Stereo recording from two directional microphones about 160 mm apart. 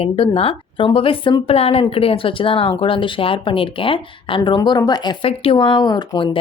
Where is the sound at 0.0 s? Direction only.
35° left (ahead or behind).